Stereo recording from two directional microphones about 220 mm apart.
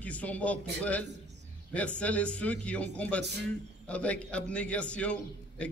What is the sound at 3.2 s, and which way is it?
Speech, 50° right (ahead or behind).